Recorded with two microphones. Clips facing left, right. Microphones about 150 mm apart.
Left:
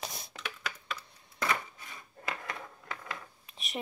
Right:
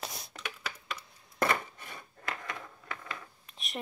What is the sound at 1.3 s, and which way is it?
Chopping, 55° right (ahead or behind).